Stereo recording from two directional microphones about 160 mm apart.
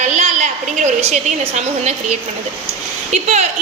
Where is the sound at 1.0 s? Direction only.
45° right (ahead or behind).